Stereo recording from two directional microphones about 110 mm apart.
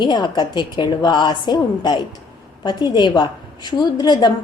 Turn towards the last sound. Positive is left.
turn(degrees=40)  # may be behind; listen again after turning